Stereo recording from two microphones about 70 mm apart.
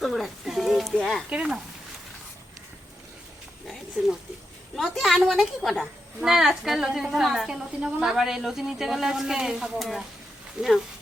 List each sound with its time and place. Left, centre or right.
0.0 s a sound: centre
1.4 s speech: centre
4.7 s a woman's voice: centre
10.6 s speech: centre